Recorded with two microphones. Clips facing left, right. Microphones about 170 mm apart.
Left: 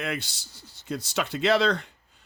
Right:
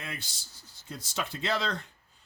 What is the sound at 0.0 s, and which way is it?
Speech, 75° left (ahead or behind).